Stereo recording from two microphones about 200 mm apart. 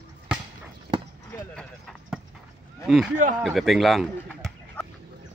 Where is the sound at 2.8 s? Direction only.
Centre (ahead or behind).